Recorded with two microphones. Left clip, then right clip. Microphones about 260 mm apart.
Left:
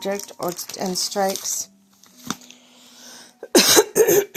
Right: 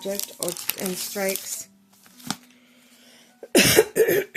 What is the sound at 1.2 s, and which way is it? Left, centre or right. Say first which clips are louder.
Speech: left 5 dB; centre.